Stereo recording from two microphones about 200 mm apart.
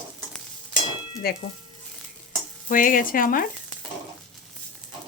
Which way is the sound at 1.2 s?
50° left (ahead or behind).